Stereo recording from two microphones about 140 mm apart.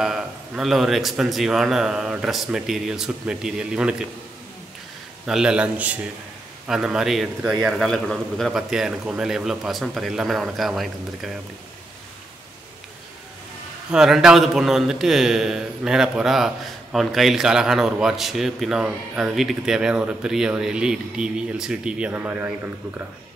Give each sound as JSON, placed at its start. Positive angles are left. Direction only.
{"t": 0.0, "sound": "a man's voice", "side_deg": -5}
{"t": 5.2, "sound": "a man's voice", "side_deg": -5}
{"t": 13.9, "sound": "a man's voice", "side_deg": -5}